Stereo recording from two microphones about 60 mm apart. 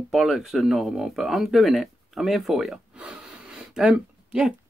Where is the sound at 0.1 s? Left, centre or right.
Centre.